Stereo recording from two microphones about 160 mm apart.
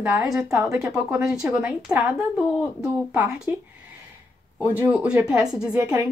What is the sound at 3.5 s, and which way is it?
Speech, 15° right (ahead or behind).